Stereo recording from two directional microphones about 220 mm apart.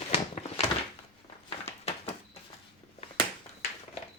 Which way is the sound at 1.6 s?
30° left (ahead or behind).